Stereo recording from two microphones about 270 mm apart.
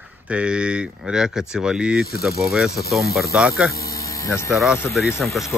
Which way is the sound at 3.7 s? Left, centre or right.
Left.